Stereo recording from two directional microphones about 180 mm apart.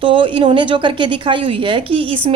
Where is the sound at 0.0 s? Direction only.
30° right (ahead or behind).